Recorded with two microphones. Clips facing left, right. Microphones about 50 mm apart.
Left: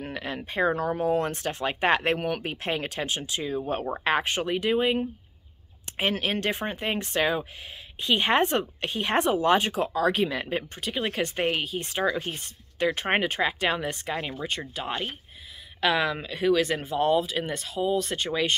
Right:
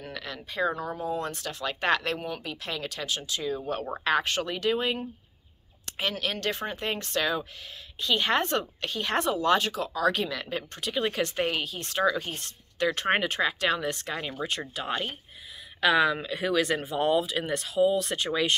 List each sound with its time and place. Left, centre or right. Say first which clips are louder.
0.1 s a sound: left 3 dB; left
0.4 s speech: left 3 dB; left
0.7 s speech: left 6 dB; left
1.3 s speech: left 4 dB; left
2.1 s speech: left 6 dB; left
2.4 s speech: left 5 dB; left
10.7 s speech: right 1 dB; centre